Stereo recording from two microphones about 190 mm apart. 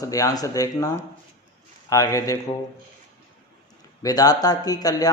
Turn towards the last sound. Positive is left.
turn(degrees=20)  # may be behind; listen again after turning